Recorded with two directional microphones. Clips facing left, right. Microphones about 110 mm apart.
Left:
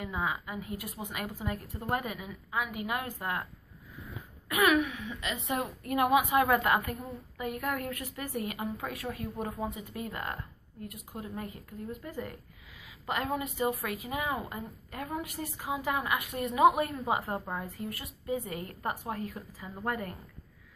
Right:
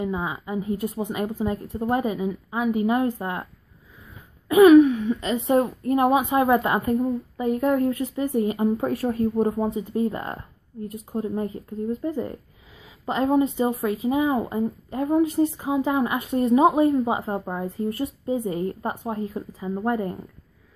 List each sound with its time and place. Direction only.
0.0 s speech: 25° right (ahead or behind)
4.5 s speech: 30° right (ahead or behind)